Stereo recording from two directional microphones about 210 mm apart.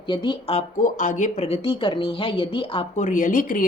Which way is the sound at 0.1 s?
20° left (ahead or behind).